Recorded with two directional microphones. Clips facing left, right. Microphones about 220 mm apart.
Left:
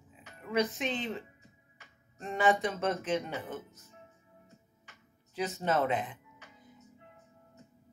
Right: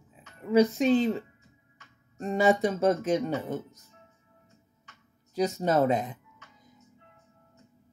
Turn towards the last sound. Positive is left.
turn(degrees=-40)  # may be behind; listen again after turning